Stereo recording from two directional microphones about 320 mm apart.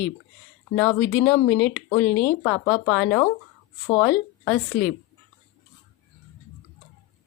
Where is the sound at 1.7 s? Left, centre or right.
Centre.